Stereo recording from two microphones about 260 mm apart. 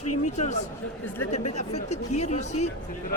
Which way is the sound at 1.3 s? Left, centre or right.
Left.